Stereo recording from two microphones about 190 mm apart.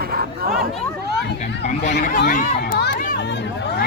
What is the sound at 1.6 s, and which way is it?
Speech, 35° left (ahead or behind).